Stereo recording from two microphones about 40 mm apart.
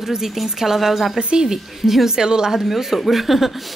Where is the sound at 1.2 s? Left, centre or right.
Right.